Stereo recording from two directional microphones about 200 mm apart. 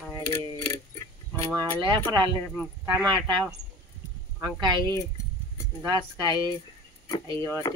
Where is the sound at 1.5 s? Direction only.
20° right (ahead or behind).